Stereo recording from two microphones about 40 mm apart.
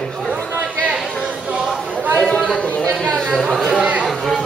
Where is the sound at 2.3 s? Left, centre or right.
Centre.